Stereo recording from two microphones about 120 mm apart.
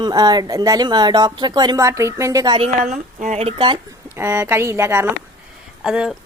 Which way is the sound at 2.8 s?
85° right.